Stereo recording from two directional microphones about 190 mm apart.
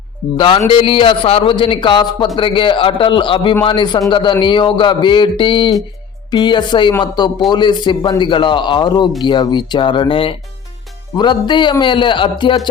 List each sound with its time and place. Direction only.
0.3 s a man's voice: 25° left (ahead or behind)